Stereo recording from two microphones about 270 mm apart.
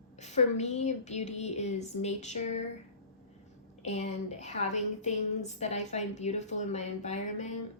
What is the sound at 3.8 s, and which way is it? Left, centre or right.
A woman's voice, left.